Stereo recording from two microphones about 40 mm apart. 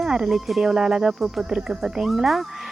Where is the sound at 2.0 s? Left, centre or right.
Centre.